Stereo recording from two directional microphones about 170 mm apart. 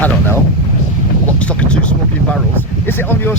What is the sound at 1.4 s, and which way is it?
Speech, 5° left (ahead or behind).